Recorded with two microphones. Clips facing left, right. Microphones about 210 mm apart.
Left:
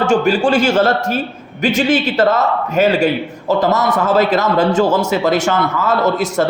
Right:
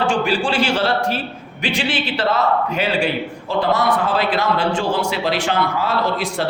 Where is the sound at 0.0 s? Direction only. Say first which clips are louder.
Left 5 dB; 45° left (ahead or behind).